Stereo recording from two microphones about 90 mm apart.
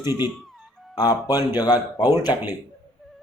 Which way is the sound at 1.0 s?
45° left (ahead or behind).